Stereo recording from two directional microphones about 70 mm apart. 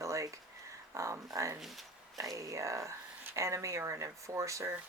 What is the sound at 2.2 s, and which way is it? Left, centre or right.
Speech, right.